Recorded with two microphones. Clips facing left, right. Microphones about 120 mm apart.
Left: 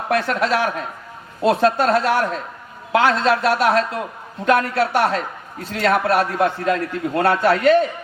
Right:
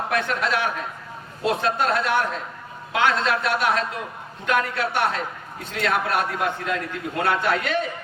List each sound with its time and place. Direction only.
0.1 s a man's voice: 40° left (ahead or behind)